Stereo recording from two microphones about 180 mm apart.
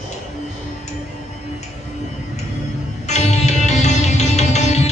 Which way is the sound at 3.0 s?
40° left (ahead or behind).